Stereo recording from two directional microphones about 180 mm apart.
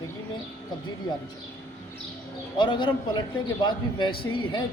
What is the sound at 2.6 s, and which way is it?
A man's voice, 25° left (ahead or behind).